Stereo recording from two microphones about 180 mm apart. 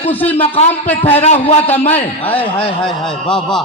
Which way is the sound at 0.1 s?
10° left (ahead or behind).